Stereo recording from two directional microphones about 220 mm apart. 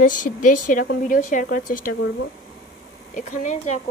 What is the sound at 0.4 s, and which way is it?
Speech, 35° left (ahead or behind).